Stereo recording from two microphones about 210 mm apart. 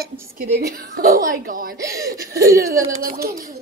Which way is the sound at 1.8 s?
15° right (ahead or behind).